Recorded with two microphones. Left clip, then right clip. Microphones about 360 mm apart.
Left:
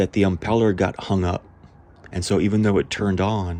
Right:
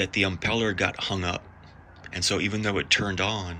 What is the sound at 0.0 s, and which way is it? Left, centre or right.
Speech, centre.